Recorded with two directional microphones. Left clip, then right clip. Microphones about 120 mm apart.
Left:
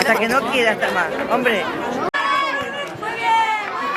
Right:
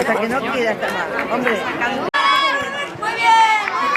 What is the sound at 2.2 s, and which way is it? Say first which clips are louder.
Chatter: right 5 dB; 20° right (ahead or behind).